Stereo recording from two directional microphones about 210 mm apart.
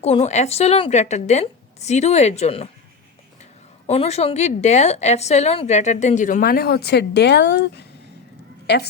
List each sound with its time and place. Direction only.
0.0 s a woman's voice: 30° left (ahead or behind)
3.8 s a woman's voice: 30° left (ahead or behind); by 8.9 s 55° left (ahead or behind)